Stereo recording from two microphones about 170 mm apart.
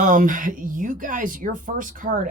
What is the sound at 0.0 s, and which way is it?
Speech, 50° right (ahead or behind).